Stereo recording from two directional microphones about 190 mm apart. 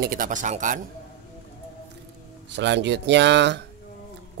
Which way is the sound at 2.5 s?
65° right (ahead or behind).